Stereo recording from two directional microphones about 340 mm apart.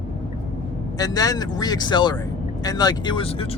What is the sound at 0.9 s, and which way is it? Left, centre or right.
Speech, centre.